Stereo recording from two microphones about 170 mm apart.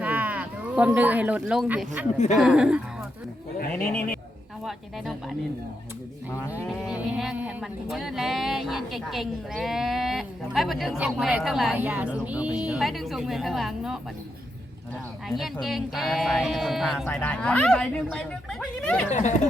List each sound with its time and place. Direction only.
0.0 s livestock: 10° right (ahead or behind)
2.1 s speech: 45° left (ahead or behind)
2.4 s speech: 5° right (ahead or behind)
6.7 s speech: 5° right (ahead or behind)
15.6 s speech: centre (ahead or behind)
17.1 s speech: 10° left (ahead or behind)
19.1 s speech: 45° left (ahead or behind)